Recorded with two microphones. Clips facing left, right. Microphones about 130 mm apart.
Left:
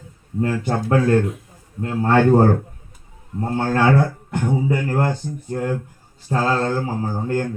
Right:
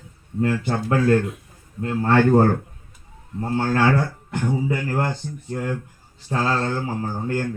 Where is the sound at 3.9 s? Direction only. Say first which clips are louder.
Left 4 dB; 15° left (ahead or behind).